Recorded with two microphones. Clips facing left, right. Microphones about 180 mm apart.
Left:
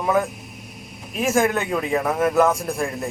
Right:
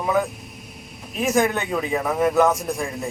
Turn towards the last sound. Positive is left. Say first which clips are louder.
# left 1 dB
turn(degrees=0)  # may be behind; listen again after turning